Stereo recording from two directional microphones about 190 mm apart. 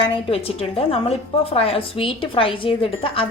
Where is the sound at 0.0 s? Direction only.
30° left (ahead or behind).